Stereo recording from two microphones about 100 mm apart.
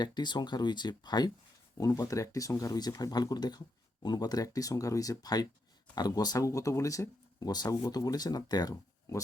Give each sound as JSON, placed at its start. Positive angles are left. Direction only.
{"t": 0.0, "sound": "speech", "side_deg": 45}
{"t": 1.8, "sound": "speech", "side_deg": 35}
{"t": 8.7, "sound": "speech", "side_deg": 30}